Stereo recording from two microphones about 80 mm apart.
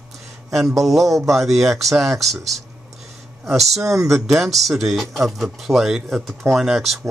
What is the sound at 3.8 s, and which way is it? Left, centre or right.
Speech, right.